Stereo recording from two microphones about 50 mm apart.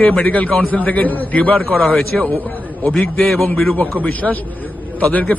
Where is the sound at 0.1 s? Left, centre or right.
Left.